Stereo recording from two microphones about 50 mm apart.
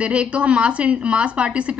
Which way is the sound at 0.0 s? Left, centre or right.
Right.